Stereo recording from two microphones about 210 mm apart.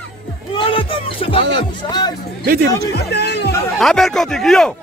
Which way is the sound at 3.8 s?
Centre (ahead or behind).